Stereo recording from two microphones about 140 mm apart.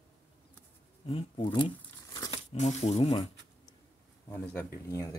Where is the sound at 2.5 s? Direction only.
50° left (ahead or behind).